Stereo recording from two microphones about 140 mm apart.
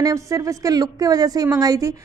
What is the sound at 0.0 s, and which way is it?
A woman's voice, 20° right (ahead or behind).